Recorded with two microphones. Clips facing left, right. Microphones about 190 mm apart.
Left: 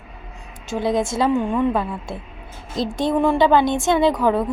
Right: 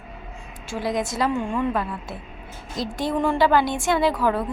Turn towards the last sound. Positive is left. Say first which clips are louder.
# left 4 dB
turn(degrees=20)  # may be behind; listen again after turning